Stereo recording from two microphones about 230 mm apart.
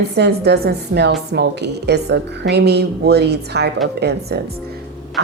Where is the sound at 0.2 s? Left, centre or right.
Right.